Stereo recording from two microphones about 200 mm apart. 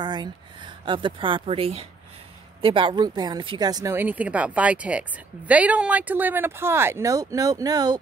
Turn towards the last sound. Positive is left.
turn(degrees=-20)  # may be behind; listen again after turning